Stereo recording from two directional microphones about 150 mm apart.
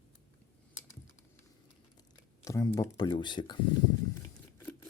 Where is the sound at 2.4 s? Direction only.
20° left (ahead or behind).